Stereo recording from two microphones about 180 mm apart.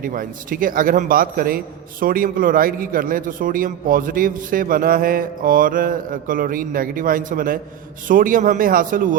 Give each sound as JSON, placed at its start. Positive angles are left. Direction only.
{"t": 0.0, "sound": "a man's voice", "side_deg": -50}